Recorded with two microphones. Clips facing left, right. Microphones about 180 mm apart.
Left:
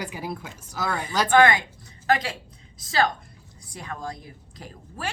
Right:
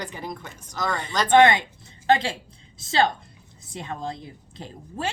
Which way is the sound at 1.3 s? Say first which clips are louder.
Right 2 dB; 25° right (ahead or behind).